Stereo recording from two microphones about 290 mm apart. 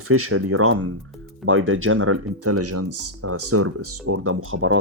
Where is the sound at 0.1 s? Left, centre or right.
Right.